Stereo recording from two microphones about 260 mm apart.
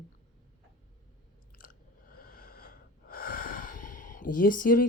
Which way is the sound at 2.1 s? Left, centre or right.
Left.